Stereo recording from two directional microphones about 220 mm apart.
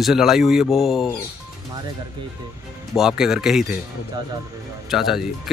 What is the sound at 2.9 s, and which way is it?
Speech, centre (ahead or behind).